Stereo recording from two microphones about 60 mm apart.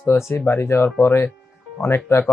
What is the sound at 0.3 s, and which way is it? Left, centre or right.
Speech, left.